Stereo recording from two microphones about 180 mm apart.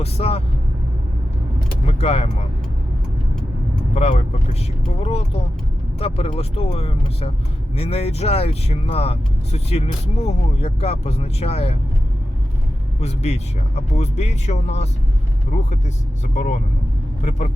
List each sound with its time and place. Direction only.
0.0 s speech: 35° left (ahead or behind)
1.9 s speech: 35° left (ahead or behind)
3.9 s speech: 35° left (ahead or behind)
13.0 s speech: 40° left (ahead or behind)
16.3 s speech: 45° left (ahead or behind)